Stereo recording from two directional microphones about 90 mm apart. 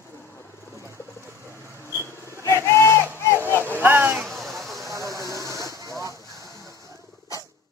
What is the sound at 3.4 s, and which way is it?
Vehicle, 25° left (ahead or behind).